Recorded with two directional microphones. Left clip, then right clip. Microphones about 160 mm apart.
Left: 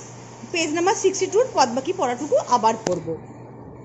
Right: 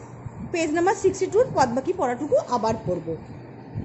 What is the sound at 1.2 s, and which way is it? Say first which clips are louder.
Speech: left 1 dB; 10° right (ahead or behind).